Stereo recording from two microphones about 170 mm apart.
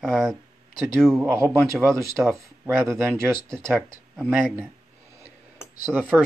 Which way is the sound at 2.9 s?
15° right (ahead or behind).